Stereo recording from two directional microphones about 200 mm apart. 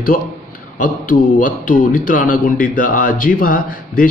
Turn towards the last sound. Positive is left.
turn(degrees=45)  # may be behind; listen again after turning